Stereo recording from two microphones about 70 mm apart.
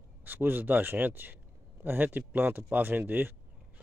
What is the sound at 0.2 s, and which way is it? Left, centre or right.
Speech, right.